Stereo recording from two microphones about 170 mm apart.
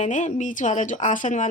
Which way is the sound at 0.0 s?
45° left (ahead or behind).